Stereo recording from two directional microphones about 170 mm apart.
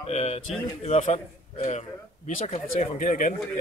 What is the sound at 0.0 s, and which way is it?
A man's voice, 40° left (ahead or behind).